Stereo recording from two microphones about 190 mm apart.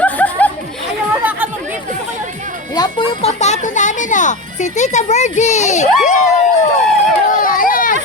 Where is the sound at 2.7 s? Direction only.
25° left (ahead or behind).